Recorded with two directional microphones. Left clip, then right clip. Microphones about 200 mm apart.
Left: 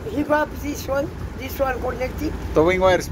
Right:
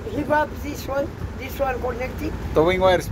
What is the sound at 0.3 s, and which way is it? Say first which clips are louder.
Speech: even; 60° left (ahead or behind).